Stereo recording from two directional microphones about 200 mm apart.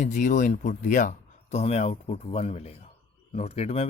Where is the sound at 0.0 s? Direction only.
40° left (ahead or behind).